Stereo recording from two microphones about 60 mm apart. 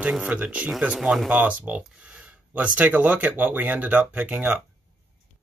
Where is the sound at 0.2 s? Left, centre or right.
Right.